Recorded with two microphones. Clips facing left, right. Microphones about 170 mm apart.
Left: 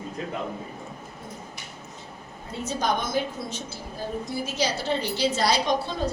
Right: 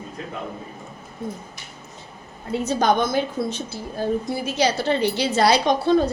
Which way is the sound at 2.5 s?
70° right (ahead or behind).